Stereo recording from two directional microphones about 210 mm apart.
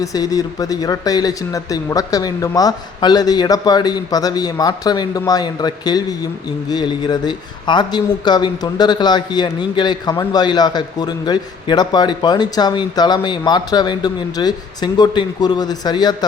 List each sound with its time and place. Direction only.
0.0 s speech: 15° left (ahead or behind)